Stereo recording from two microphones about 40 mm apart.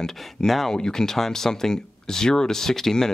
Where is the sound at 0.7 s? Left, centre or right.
Centre.